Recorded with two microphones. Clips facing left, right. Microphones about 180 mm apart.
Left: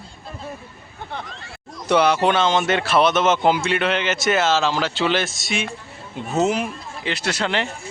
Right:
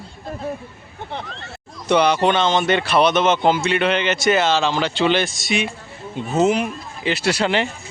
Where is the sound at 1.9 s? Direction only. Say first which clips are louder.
Right 1 dB; 5° left (ahead or behind).